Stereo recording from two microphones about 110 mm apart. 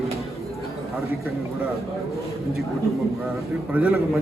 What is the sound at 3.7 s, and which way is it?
Speech, 10° right (ahead or behind).